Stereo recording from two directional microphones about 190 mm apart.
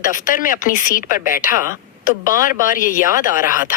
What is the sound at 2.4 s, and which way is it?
Speech, 45° left (ahead or behind).